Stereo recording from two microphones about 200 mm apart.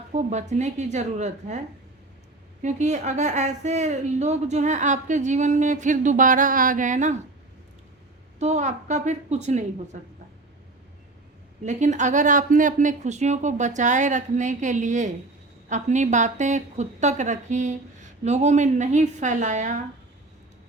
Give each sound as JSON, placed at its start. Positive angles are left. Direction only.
{"t": 0.1, "sound": "a woman's voice", "side_deg": -35}
{"t": 8.4, "sound": "a woman's voice", "side_deg": -35}
{"t": 11.6, "sound": "a woman's voice", "side_deg": -35}